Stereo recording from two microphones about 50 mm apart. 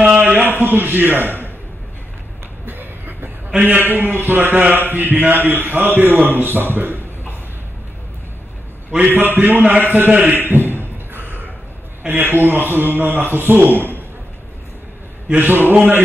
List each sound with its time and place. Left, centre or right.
0.1 s a sound: right
0.5 s speech: right
2.6 s a sound: right
3.6 s a man's voice: right
9.1 s a man's voice: right
10.3 s beatboxing: right
12.1 s a man's voice: right
15.3 s a man's voice: right